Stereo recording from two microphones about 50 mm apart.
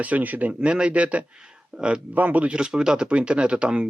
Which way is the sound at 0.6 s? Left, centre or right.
Centre.